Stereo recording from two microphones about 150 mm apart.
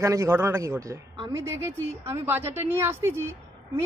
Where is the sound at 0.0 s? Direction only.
20° right (ahead or behind).